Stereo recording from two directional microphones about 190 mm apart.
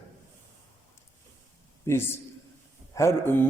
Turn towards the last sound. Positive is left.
turn(degrees=15)  # may be behind; listen again after turning